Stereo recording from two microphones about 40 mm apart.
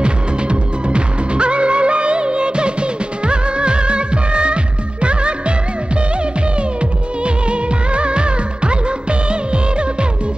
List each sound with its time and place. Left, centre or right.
0.0 s music: right
7.2 s music of bollywood: right